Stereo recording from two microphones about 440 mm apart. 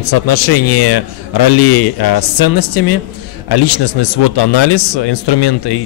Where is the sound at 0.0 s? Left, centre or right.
Left.